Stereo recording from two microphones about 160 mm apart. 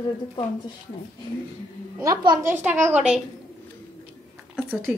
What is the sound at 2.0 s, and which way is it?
Speech, 25° right (ahead or behind).